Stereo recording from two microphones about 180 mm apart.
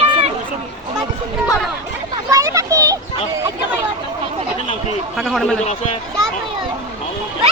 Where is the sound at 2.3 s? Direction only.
20° right (ahead or behind).